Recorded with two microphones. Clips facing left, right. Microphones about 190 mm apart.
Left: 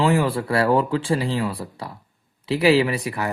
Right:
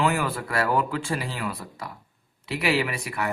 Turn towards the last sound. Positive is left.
turn(degrees=35)  # may be behind; listen again after turning